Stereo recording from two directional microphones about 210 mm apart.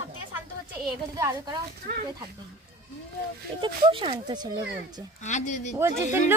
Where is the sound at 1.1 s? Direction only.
15° right (ahead or behind).